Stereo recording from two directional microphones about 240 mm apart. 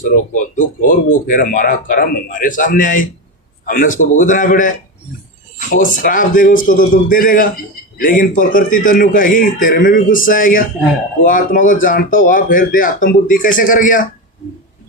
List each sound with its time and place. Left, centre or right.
0.0 s speech: left